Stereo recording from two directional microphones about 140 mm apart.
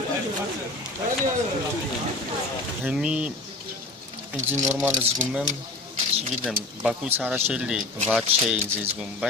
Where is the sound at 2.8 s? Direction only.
5° right (ahead or behind).